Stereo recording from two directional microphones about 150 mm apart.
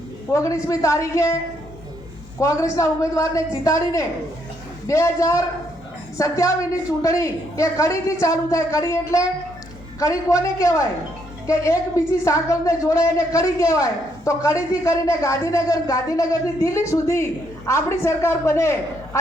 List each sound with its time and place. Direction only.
0.3 s a woman's voice: 20° left (ahead or behind)
2.4 s a woman's voice: 20° left (ahead or behind)